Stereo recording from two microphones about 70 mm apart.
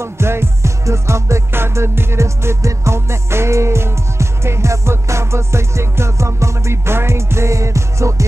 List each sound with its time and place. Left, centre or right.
0.0 s music: right